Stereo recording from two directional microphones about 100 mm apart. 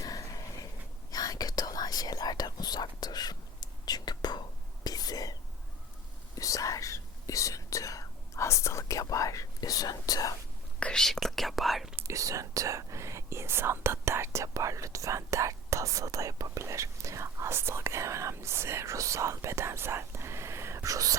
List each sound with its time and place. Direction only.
0.0 s a sound: 35° left (ahead or behind)
1.1 s whispering: 40° left (ahead or behind)
10.8 s whispering: 10° left (ahead or behind)
12.0 s whispering: 35° right (ahead or behind)